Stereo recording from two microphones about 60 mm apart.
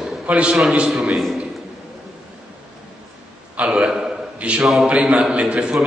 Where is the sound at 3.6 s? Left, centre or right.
Centre.